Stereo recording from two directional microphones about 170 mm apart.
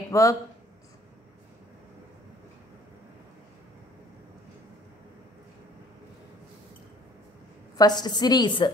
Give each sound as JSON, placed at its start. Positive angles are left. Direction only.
{"t": 0.1, "sound": "speech", "side_deg": 20}
{"t": 7.7, "sound": "a woman's voice", "side_deg": 25}